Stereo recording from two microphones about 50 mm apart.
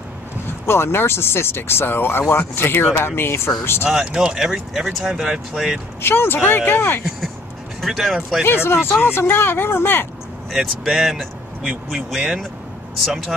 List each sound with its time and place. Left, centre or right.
0.7 s speech: left
3.9 s speech: centre
5.9 s speech: left
7.8 s speech: centre
8.5 s speech: left
10.5 s speech: centre